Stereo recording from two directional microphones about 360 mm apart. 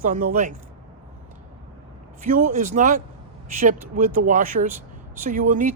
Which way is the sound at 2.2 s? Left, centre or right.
Right.